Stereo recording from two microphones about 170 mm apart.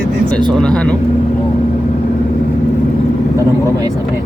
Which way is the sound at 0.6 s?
5° left (ahead or behind).